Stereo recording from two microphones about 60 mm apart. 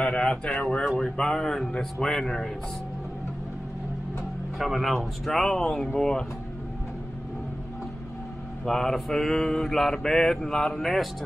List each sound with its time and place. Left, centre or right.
0.0 s speech: centre
0.6 s mantra: centre
4.6 s speech: centre
5.9 s mantra: centre
8.6 s mantra: centre